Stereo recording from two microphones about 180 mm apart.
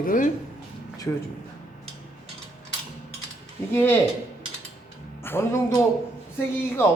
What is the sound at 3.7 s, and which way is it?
Speech, 10° left (ahead or behind).